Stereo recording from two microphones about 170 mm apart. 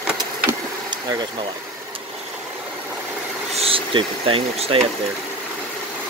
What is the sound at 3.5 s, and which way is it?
Speech, 35° right (ahead or behind).